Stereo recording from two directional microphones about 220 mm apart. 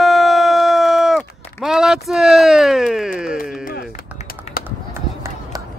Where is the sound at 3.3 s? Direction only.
45° left (ahead or behind).